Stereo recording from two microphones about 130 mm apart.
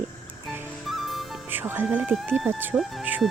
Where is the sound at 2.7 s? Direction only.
5° right (ahead or behind).